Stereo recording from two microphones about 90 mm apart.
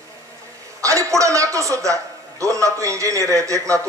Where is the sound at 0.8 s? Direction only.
35° right (ahead or behind).